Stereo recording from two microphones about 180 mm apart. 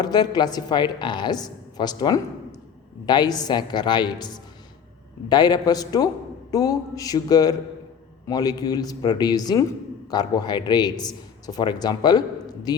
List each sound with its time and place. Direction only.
0.0 s a man's voice: 20° left (ahead or behind)